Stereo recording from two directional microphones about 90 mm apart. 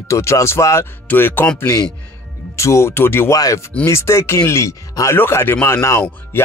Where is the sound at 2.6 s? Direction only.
30° left (ahead or behind).